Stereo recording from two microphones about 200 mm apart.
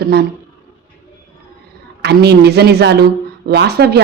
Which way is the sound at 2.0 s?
55° right (ahead or behind).